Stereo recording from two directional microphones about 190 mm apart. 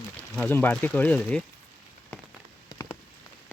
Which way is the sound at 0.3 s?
10° left (ahead or behind).